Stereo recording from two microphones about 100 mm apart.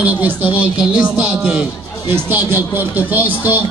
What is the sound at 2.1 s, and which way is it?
Speech, 20° right (ahead or behind).